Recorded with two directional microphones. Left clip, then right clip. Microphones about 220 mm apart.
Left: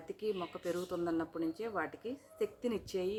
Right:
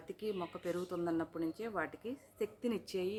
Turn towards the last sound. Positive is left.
turn(degrees=-10)  # may be behind; listen again after turning